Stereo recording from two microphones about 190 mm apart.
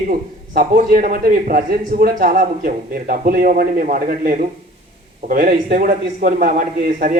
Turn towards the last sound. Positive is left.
turn(degrees=-45)  # may be behind; listen again after turning